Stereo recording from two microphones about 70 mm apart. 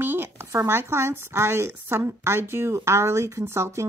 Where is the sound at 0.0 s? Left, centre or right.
Right.